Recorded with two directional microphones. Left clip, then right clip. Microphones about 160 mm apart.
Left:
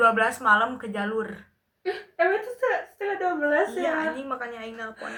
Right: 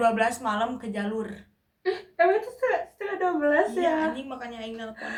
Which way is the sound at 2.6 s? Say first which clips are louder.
Left 1 dB; 25° right (ahead or behind).